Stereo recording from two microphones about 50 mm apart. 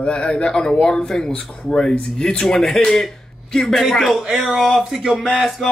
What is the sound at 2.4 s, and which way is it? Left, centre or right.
Speech, centre.